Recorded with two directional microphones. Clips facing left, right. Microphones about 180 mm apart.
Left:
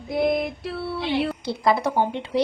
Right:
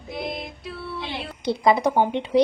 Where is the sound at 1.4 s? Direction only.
20° right (ahead or behind).